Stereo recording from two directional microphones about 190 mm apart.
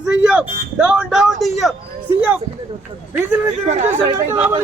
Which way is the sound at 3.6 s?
35° right (ahead or behind).